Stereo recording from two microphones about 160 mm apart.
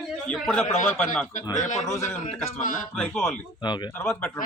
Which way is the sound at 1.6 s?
50° left (ahead or behind).